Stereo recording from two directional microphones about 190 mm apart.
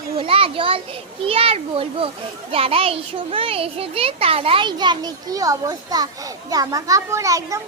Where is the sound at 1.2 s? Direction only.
30° right (ahead or behind).